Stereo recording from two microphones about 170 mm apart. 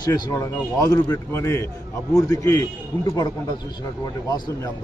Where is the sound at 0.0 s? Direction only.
25° left (ahead or behind).